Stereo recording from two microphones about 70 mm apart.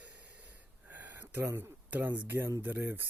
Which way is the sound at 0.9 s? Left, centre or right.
Right.